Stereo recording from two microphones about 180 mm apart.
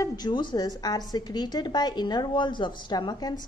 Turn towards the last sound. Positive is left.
turn(degrees=20)  # may be behind; listen again after turning